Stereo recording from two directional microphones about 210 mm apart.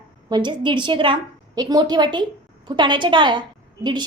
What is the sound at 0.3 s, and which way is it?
A woman's voice, 20° right (ahead or behind).